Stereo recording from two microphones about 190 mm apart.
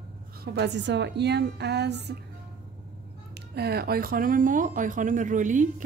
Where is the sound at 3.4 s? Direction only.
55° right (ahead or behind); by 5.7 s 40° right (ahead or behind).